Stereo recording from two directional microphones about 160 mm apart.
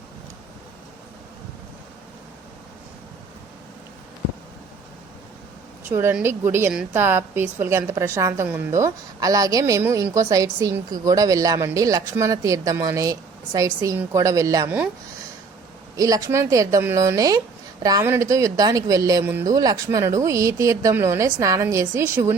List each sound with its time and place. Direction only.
5.9 s a woman's voice: 15° right (ahead or behind)
16.0 s speech: 20° right (ahead or behind)